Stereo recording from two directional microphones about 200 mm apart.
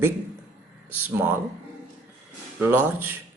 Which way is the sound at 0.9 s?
10° right (ahead or behind).